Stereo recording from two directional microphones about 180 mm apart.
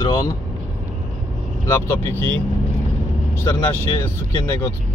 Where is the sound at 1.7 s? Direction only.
15° left (ahead or behind).